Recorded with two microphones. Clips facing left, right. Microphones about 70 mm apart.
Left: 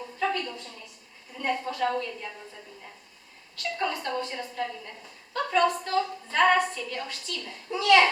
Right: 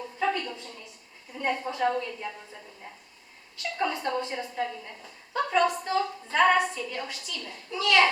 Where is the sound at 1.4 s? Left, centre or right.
Centre.